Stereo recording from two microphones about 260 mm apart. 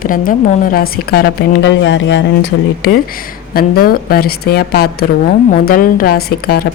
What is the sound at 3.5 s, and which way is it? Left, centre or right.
A woman's voice, left.